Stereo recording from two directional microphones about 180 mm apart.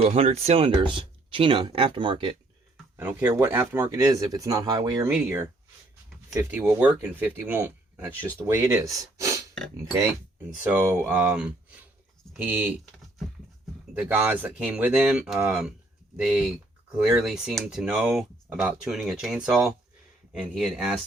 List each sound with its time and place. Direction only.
0.0 s speech: 35° right (ahead or behind)
3.0 s speech: 10° right (ahead or behind)
6.3 s speech: 10° right (ahead or behind)
10.5 s speech: 10° right (ahead or behind)
13.9 s speech: 10° right (ahead or behind)